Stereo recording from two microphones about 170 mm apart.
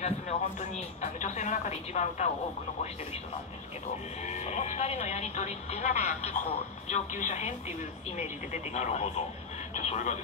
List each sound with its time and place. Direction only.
0.0 s speech: 40° left (ahead or behind)
4.3 s speech: 40° left (ahead or behind)
8.7 s speech: 40° left (ahead or behind)